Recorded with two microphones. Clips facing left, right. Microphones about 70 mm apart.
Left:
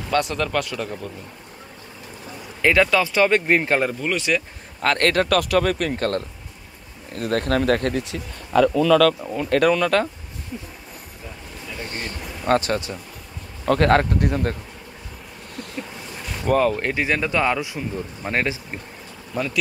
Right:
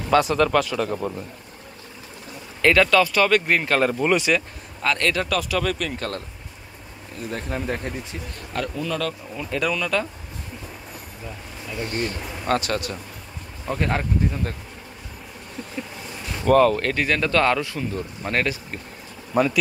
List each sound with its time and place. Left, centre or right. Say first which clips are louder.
0.1 s speech: right 4 dB; centre
2.6 s speech: right 1 dB; centre
4.0 s speech: right 5 dB; centre
4.8 s speech: left 4 dB; left
7.2 s speech: left 8 dB; left
9.3 s speech: left 7 dB; left
11.9 s a sound: right 4 dB; left
13.7 s speech: left 8 dB; left
16.4 s speech: right 3 dB; centre
16.8 s speech: even; centre
19.3 s speech: right 5 dB; centre